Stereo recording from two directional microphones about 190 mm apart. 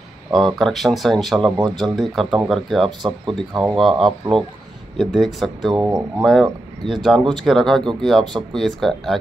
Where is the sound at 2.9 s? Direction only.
25° right (ahead or behind).